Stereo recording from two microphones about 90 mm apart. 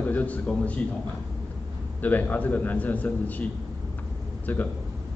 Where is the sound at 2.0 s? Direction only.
20° left (ahead or behind).